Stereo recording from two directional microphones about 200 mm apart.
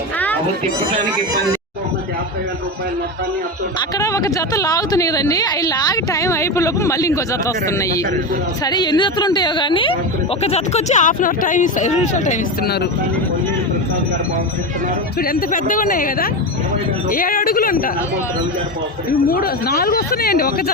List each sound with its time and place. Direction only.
3.8 s a woman's voice: 15° left (ahead or behind); by 12.4 s 35° left (ahead or behind)
15.2 s speech: 45° left (ahead or behind)
19.3 s speech: 50° left (ahead or behind)